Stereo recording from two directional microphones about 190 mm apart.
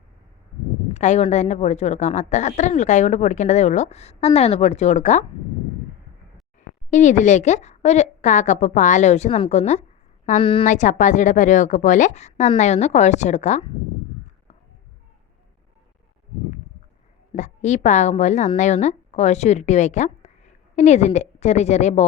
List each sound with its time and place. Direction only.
0.9 s a woman's voice: 35° left (ahead or behind)
6.9 s a woman's voice: 40° left (ahead or behind)
10.7 s a woman's voice: 40° left (ahead or behind)
17.3 s a woman's voice: 40° left (ahead or behind)